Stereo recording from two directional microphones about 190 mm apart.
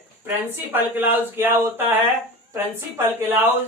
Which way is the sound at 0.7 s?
10° right (ahead or behind).